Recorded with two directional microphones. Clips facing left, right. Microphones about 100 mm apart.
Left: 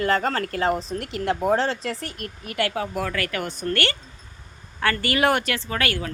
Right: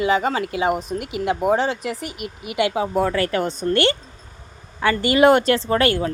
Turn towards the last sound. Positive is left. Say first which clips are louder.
# right 8 dB
turn(degrees=-30)  # may be behind; listen again after turning